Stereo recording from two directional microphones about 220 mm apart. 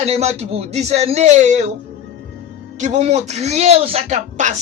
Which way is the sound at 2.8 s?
30° right (ahead or behind).